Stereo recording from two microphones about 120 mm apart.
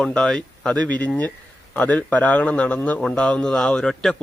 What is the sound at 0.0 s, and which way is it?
Speech, 5° left (ahead or behind).